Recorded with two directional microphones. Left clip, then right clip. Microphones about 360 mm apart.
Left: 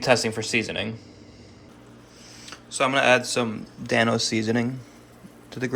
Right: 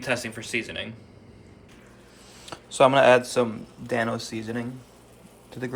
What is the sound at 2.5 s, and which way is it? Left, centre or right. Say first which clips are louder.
A man's voice: right 5 dB; centre.